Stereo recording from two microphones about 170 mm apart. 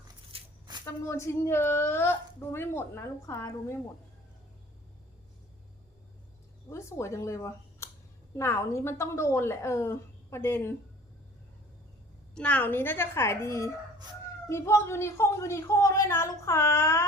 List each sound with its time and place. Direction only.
0.3 s a sound: 30° right (ahead or behind)
0.9 s a woman's voice: 15° left (ahead or behind)
6.7 s a woman's voice: 15° left (ahead or behind)
12.3 s a woman's voice: 5° left (ahead or behind)